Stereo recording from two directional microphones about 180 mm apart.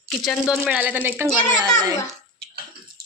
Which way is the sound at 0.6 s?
10° right (ahead or behind).